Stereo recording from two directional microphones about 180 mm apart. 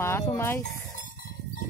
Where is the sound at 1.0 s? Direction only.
45° left (ahead or behind).